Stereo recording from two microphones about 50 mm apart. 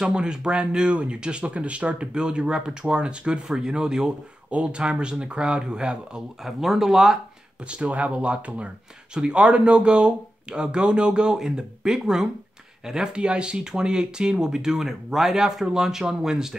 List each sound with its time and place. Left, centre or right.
0.0 s speech: centre
6.4 s speech: centre
7.6 s speech: right